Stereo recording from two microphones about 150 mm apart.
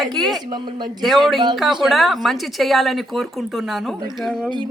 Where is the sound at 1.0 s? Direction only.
Centre (ahead or behind).